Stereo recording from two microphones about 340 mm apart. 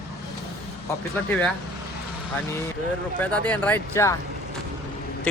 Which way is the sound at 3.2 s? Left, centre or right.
Centre.